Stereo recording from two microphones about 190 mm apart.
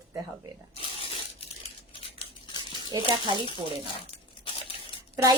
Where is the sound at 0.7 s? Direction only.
30° left (ahead or behind).